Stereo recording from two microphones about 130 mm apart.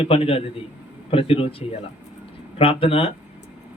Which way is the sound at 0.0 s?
45° left (ahead or behind).